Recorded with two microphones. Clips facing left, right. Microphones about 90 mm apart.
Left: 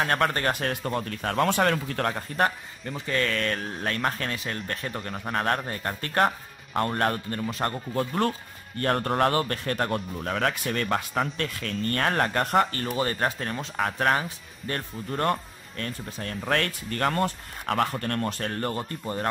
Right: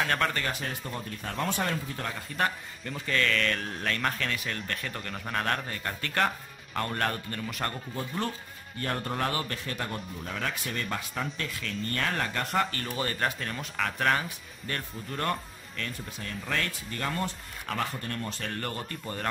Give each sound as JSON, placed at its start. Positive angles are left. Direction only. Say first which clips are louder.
{"t": 0.0, "sound": "speech", "louder": "left 4 dB", "side_deg": 40}
{"t": 0.5, "sound": "speech", "louder": "left 7 dB", "side_deg": 55}
{"t": 2.1, "sound": "speech", "louder": "left 1 dB", "side_deg": 40}
{"t": 3.1, "sound": "speech", "louder": "left 1 dB", "side_deg": 30}
{"t": 7.9, "sound": "a man's voice", "louder": "left 7 dB", "side_deg": 55}
{"t": 15.8, "sound": "speech", "louder": "left 4 dB", "side_deg": 50}
{"t": 18.5, "sound": "speech", "louder": "left 5 dB", "side_deg": 25}